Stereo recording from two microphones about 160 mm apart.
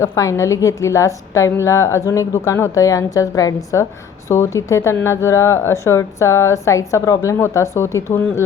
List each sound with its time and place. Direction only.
0.0 s speech: 15° left (ahead or behind)